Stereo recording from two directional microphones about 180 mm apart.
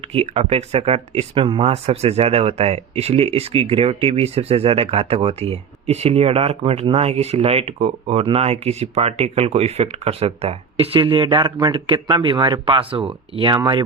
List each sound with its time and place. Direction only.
0.1 s speech: 35° right (ahead or behind)